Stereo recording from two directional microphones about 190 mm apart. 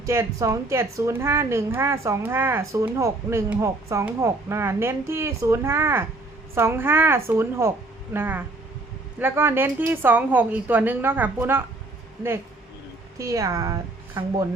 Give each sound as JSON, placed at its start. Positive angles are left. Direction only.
{"t": 0.0, "sound": "speech", "side_deg": -15}
{"t": 13.1, "sound": "a woman's voice", "side_deg": -15}